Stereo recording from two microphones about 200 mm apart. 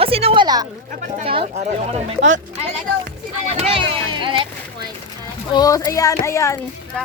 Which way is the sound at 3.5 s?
25° right (ahead or behind).